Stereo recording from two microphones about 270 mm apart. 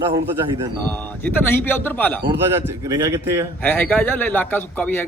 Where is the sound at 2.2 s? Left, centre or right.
Centre.